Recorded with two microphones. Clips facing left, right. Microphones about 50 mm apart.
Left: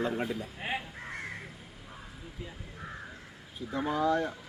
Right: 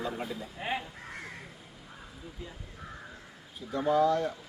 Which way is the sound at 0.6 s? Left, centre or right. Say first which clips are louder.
Right 2 dB; centre.